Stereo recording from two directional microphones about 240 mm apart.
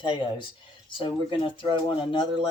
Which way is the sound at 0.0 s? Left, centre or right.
Left.